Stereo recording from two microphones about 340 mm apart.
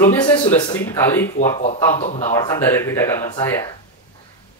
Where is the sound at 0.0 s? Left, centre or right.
Centre.